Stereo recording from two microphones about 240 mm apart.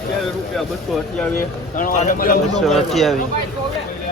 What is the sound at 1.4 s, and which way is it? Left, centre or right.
Speech, left.